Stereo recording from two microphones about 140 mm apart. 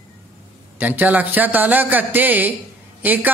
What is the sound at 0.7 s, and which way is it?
A woman's voice, 10° right (ahead or behind).